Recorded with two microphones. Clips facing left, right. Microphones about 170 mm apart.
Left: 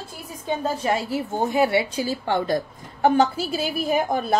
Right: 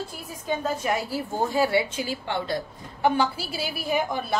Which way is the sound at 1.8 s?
40° left (ahead or behind).